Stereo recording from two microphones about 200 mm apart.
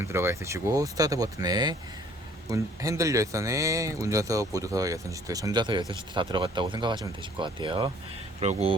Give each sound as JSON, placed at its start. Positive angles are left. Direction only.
{"t": 0.0, "sound": "speech", "side_deg": -10}